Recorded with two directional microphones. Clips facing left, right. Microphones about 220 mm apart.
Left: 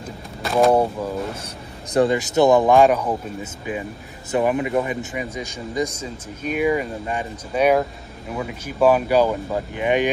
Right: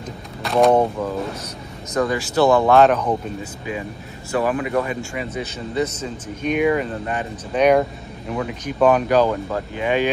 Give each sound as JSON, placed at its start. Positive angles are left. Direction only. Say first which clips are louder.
{"t": 0.4, "sound": "speech", "louder": "right 1 dB", "side_deg": 0}
{"t": 2.0, "sound": "speech", "louder": "left 2 dB", "side_deg": 25}
{"t": 4.3, "sound": "speech", "louder": "left 1 dB", "side_deg": 20}